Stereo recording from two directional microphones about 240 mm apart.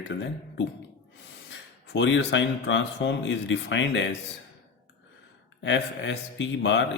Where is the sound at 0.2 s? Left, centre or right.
Left.